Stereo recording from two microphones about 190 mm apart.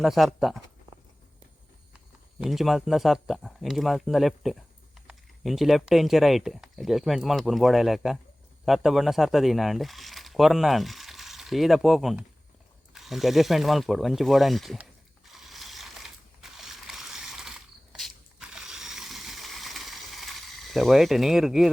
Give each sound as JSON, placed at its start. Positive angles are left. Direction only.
{"t": 0.0, "sound": "speech", "side_deg": 0}
{"t": 2.4, "sound": "speech", "side_deg": 0}
{"t": 15.3, "sound": "mechanisms", "side_deg": 0}
{"t": 17.9, "sound": "ratchet", "side_deg": 0}